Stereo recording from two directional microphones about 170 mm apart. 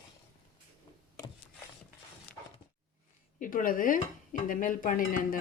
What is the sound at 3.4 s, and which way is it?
Dishes, 55° left (ahead or behind).